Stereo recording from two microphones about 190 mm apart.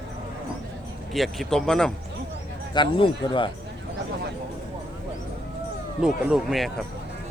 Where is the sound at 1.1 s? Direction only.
Centre (ahead or behind).